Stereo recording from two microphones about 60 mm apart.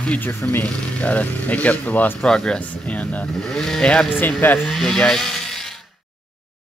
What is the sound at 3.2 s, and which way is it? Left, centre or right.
Speech, centre.